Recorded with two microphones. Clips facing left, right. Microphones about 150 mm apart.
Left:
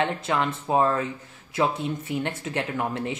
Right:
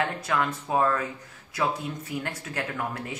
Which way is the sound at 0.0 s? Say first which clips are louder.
Left 2 dB; 25° left (ahead or behind).